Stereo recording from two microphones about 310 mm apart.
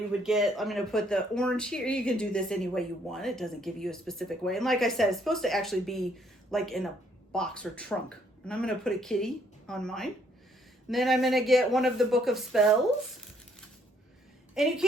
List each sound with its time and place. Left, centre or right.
0.2 s speech: centre
14.5 s speech: centre